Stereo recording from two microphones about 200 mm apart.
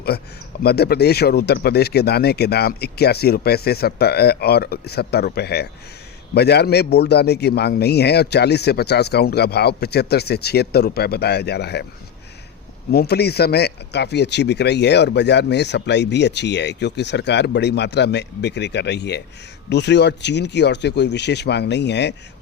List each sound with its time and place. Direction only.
0.1 s speech: 55° left (ahead or behind)
12.9 s speech: 50° left (ahead or behind)